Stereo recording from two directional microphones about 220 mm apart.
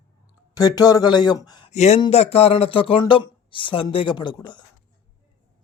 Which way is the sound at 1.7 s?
30° left (ahead or behind).